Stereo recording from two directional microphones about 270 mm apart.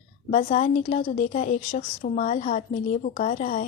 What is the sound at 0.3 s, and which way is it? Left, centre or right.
A woman's voice, left.